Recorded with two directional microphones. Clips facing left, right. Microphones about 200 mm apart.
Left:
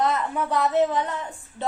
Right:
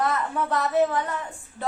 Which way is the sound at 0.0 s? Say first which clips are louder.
Left 1 dB; 15° left (ahead or behind).